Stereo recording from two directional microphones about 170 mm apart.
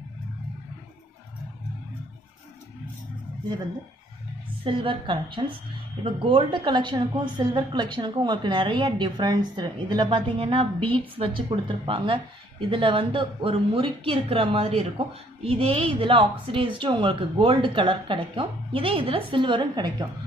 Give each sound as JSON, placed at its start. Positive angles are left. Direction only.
{"t": 4.6, "sound": "a woman's voice", "side_deg": -30}